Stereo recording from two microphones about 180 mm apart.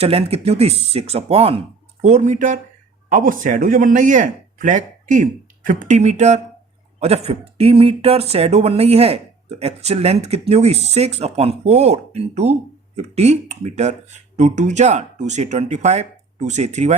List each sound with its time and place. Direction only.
0.0 s a man's voice: 35° right (ahead or behind)